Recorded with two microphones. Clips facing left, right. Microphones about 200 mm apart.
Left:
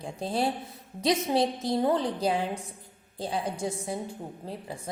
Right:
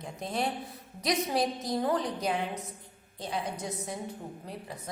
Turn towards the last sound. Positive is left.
turn(degrees=30)  # may be behind; listen again after turning